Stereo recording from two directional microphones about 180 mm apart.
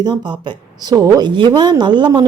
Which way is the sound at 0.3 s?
25° right (ahead or behind).